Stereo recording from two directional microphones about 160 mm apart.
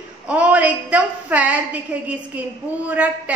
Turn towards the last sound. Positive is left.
turn(degrees=-10)  # may be behind; listen again after turning